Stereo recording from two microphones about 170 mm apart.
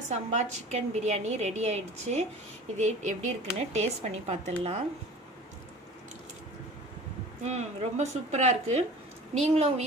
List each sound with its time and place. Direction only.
0.1 s a woman's voice: 40° right (ahead or behind)
7.4 s a woman's voice: 40° right (ahead or behind)